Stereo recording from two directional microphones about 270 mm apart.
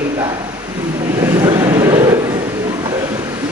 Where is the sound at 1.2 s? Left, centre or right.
Centre.